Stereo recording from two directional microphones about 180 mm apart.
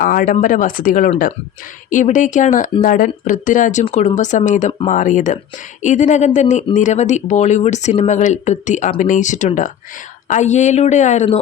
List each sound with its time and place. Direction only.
0.0 s speech: 50° left (ahead or behind)